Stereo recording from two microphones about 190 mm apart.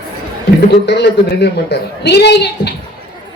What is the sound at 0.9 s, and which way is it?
A man's voice, 65° left (ahead or behind).